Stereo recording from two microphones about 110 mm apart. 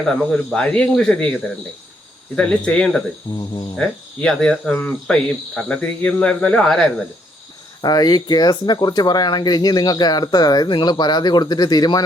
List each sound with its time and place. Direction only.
0.1 s speech: 5° left (ahead or behind)
2.3 s cricket: 10° left (ahead or behind)
7.8 s speech: 40° left (ahead or behind)